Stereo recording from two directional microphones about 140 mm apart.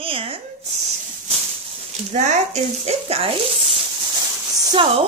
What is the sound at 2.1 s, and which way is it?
Speech, 55° right (ahead or behind).